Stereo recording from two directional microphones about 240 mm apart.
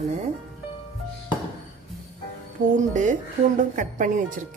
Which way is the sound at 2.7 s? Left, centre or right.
Right.